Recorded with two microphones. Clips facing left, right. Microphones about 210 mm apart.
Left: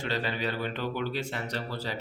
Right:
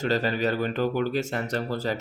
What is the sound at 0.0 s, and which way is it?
Speech, 45° right (ahead or behind).